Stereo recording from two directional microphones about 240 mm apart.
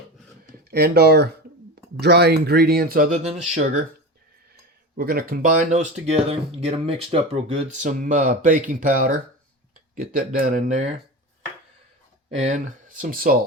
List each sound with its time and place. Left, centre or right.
0.7 s speech: right
4.9 s speech: right
12.4 s speech: right